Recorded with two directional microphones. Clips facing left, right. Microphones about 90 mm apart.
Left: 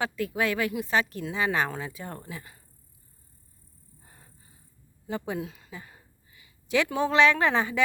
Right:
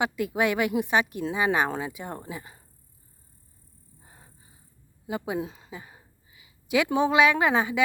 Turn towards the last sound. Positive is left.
turn(degrees=-5)  # may be behind; listen again after turning